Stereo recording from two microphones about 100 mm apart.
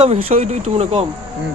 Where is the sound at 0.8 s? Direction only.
80° right.